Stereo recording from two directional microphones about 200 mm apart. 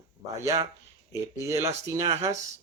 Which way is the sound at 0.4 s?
15° right (ahead or behind).